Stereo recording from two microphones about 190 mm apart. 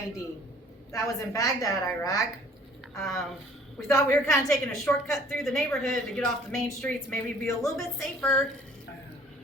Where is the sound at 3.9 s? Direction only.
15° left (ahead or behind).